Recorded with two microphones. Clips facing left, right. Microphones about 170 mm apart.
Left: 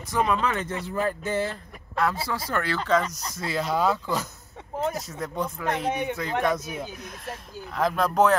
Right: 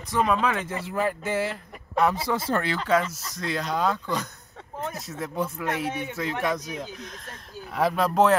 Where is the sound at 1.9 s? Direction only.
20° right (ahead or behind).